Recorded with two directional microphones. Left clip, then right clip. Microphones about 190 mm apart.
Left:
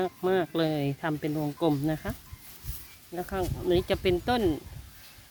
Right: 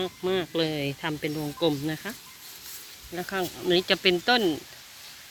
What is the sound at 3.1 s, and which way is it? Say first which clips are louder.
Speech: right 2 dB; 15° left (ahead or behind).